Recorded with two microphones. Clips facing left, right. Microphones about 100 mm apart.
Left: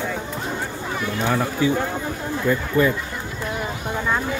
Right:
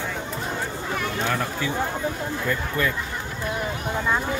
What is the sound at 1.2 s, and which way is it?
Speech, 20° left (ahead or behind).